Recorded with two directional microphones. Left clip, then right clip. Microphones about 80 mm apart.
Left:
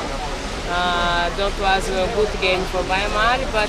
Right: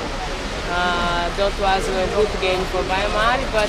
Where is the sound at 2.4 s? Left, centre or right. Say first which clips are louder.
Left 1 dB; centre.